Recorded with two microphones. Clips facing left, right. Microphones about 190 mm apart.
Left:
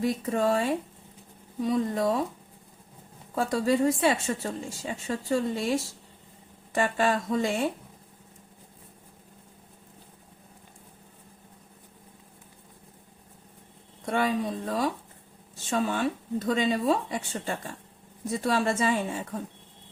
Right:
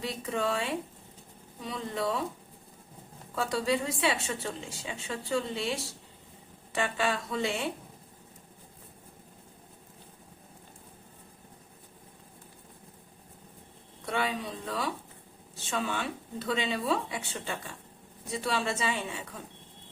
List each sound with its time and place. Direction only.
0.0 s a woman's voice: 45° left (ahead or behind)
3.3 s a woman's voice: 45° left (ahead or behind)
14.0 s a woman's voice: 45° left (ahead or behind)